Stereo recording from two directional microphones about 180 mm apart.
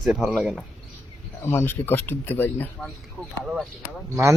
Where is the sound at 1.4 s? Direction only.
10° left (ahead or behind).